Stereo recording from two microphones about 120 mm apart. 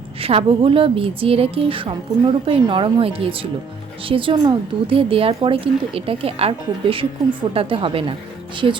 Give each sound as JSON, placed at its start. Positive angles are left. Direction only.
{"t": 0.2, "sound": "a woman's voice", "side_deg": -50}